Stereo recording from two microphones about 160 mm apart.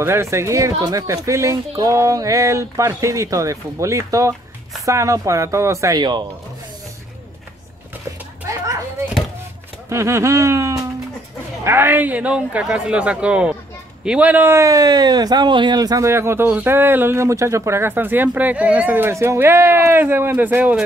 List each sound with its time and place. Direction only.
0.0 s speech: 15° right (ahead or behind)
9.8 s speech: 15° right (ahead or behind)